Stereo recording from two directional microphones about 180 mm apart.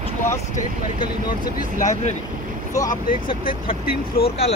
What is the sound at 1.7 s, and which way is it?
Speech, 40° left (ahead or behind).